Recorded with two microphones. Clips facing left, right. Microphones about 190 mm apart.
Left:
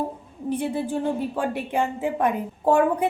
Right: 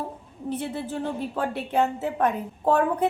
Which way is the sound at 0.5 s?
15° left (ahead or behind).